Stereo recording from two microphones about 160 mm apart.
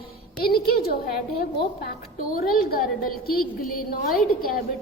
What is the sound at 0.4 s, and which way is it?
A woman's voice, 70° left (ahead or behind).